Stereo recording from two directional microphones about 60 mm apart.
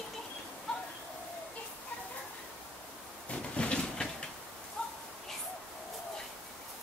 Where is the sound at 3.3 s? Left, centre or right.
Centre.